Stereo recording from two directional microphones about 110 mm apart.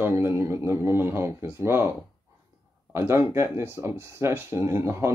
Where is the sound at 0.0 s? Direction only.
20° right (ahead or behind).